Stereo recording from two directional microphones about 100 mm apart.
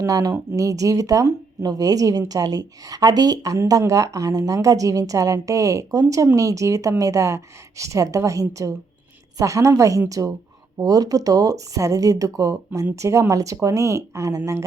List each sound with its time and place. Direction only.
0.0 s speech: 35° right (ahead or behind)